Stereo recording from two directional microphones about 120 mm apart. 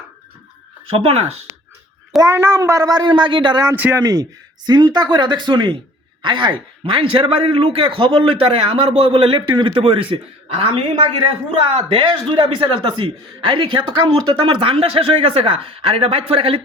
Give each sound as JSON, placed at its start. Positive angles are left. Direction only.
{"t": 0.9, "sound": "speech", "side_deg": -55}
{"t": 2.2, "sound": "speech", "side_deg": -20}
{"t": 3.8, "sound": "speech", "side_deg": -15}
{"t": 4.0, "sound": "a man's voice", "side_deg": -30}